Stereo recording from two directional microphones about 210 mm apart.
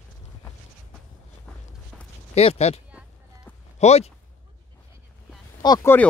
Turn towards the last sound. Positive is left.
turn(degrees=15)  # may be behind; listen again after turning